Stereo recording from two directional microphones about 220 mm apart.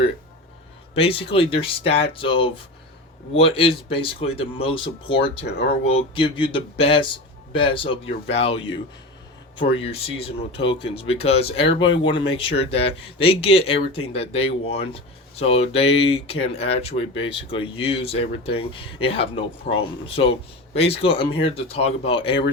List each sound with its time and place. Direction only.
0.9 s speech: 25° left (ahead or behind)